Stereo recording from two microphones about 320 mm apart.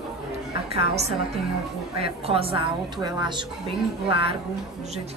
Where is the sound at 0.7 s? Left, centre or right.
Centre.